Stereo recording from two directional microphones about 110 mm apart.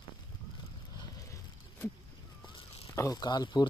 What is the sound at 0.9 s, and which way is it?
Vehicle, 35° left (ahead or behind).